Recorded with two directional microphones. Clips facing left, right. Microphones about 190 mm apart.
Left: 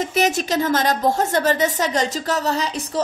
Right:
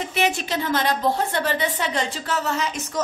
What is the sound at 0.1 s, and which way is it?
A woman's voice, 40° left (ahead or behind).